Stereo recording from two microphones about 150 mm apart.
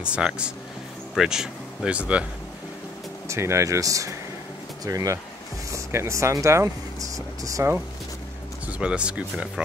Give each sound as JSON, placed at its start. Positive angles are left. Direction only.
{"t": 0.0, "sound": "speech", "side_deg": -5}
{"t": 3.3, "sound": "speech", "side_deg": -20}
{"t": 8.6, "sound": "speech", "side_deg": -10}